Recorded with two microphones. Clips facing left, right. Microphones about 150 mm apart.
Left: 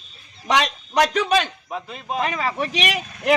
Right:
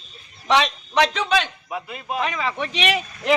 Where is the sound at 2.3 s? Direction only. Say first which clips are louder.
Left 2 dB; 45° left (ahead or behind).